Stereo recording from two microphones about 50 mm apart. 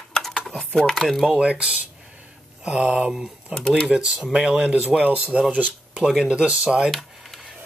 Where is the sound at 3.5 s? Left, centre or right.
Centre.